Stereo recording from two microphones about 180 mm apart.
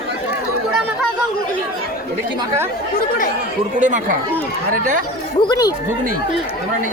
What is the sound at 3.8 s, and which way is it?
Speech, 45° right (ahead or behind).